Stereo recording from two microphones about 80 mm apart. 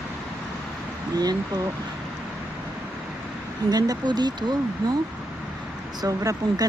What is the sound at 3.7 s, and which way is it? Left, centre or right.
Speech, right.